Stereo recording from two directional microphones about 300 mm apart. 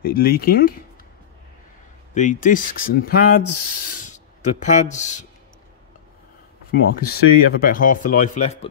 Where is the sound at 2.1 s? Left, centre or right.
Left.